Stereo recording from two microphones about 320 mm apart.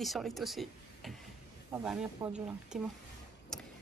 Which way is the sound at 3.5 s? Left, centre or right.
Centre.